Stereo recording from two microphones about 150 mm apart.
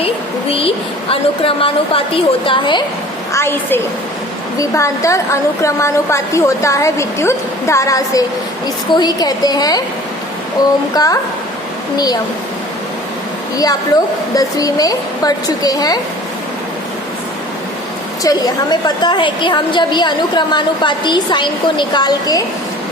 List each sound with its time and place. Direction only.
1.1 s a woman's voice: 40° left (ahead or behind)
3.3 s a woman's voice: 15° left (ahead or behind)
14.3 s a woman's voice: 25° left (ahead or behind)
18.2 s a woman's voice: 25° left (ahead or behind)